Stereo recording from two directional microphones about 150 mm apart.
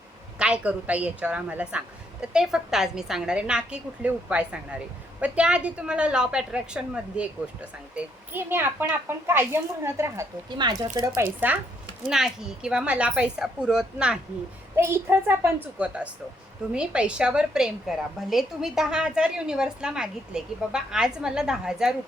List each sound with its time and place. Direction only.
0.3 s a woman's voice: 5° right (ahead or behind); by 10.8 s 25° right (ahead or behind)
11.1 s a woman's voice: 10° right (ahead or behind)
14.8 s a woman's voice: 15° right (ahead or behind)